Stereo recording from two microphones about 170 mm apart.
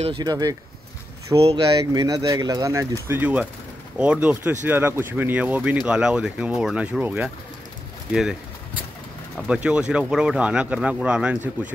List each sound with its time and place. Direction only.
0.0 s speech: 25° right (ahead or behind)
1.6 s speech: 20° right (ahead or behind); by 8.4 s 5° right (ahead or behind)
9.5 s speech: 5° right (ahead or behind)